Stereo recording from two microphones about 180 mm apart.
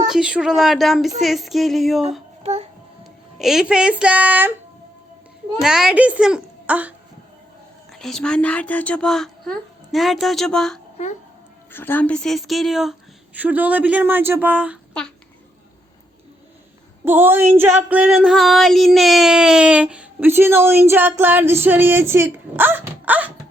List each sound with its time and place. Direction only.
0.1 s speech: 5° right (ahead or behind)
2.4 s child singing: 35° right (ahead or behind)
3.0 s speech: centre (ahead or behind)
5.5 s speech: 5° right (ahead or behind)
7.9 s speech: 5° left (ahead or behind)
11.7 s a sound: 10° left (ahead or behind); by 14.8 s 10° right (ahead or behind)
17.1 s a sound: 10° right (ahead or behind)